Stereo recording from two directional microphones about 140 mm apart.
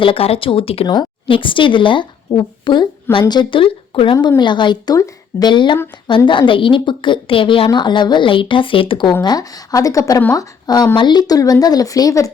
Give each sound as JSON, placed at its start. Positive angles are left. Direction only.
{"t": 0.0, "sound": "a woman's voice", "side_deg": 40}